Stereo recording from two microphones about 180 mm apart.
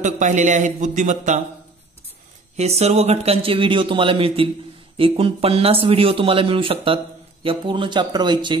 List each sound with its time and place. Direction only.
0.0 s a man's voice: 45° right (ahead or behind)
2.5 s speech: 35° right (ahead or behind)